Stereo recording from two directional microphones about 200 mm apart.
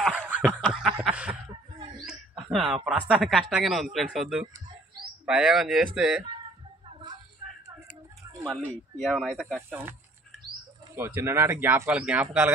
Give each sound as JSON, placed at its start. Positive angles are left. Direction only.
{"t": 0.0, "sound": "snicker", "side_deg": -5}
{"t": 0.5, "sound": "a sound", "side_deg": 5}
{"t": 2.0, "sound": "speech", "side_deg": -5}
{"t": 6.9, "sound": "a sound", "side_deg": -25}
{"t": 8.5, "sound": "speech", "side_deg": 0}
{"t": 11.0, "sound": "speech", "side_deg": -10}